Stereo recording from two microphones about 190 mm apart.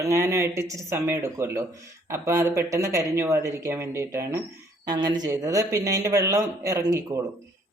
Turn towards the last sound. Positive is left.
turn(degrees=-15)  # may be behind; listen again after turning